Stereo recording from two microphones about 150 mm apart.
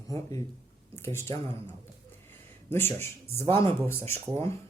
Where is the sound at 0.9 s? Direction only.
15° left (ahead or behind).